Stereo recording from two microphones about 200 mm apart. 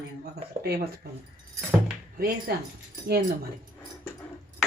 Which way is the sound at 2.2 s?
50° right (ahead or behind).